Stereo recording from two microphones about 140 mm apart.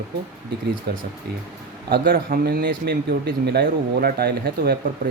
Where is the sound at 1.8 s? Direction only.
90° right.